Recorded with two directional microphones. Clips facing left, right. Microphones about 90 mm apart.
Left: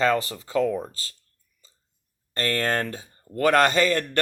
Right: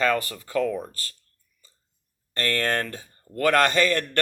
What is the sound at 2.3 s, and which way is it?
Speech, 30° left (ahead or behind).